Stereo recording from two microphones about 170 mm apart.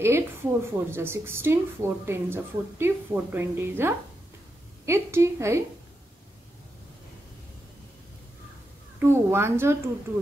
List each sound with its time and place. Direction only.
0.0 s a woman's voice: 15° right (ahead or behind)
9.0 s a woman's voice: 15° right (ahead or behind)